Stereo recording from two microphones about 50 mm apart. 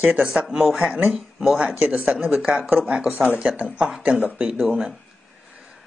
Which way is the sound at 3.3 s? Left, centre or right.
Right.